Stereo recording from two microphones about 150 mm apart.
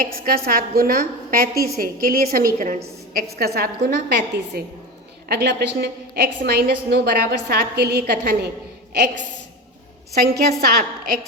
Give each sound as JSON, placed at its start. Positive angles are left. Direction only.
{"t": 0.0, "sound": "a woman's voice", "side_deg": -75}
{"t": 2.6, "sound": "a woman's voice", "side_deg": -60}
{"t": 3.3, "sound": "a woman's voice", "side_deg": -90}
{"t": 10.6, "sound": "a woman's voice", "side_deg": -85}